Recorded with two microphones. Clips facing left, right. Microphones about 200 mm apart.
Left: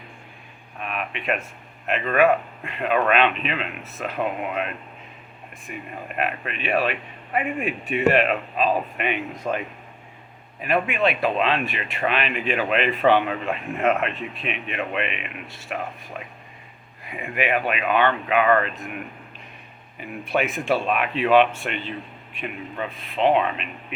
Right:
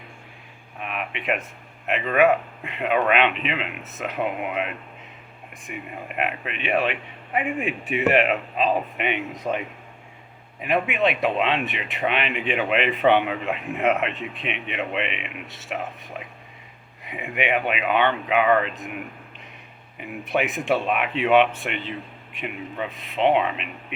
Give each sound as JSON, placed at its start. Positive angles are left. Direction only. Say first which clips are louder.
{"t": 0.8, "sound": "a sound", "louder": "left 1 dB", "side_deg": -20}
{"t": 1.9, "sound": "speech", "louder": "even", "side_deg": -15}
{"t": 10.6, "sound": "speech", "louder": "even", "side_deg": -20}
{"t": 17.1, "sound": "speech", "louder": "even", "side_deg": -15}
{"t": 20.0, "sound": "speech", "louder": "even", "side_deg": -20}